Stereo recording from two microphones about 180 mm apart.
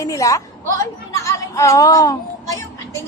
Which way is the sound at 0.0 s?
20° left (ahead or behind).